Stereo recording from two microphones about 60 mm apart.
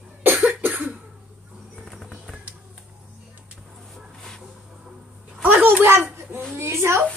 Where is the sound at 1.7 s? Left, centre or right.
Centre.